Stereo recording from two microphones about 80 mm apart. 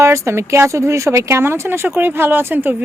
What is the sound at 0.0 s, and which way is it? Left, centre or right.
Speech, right.